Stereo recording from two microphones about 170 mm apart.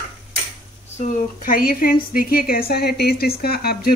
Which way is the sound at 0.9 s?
45° left (ahead or behind).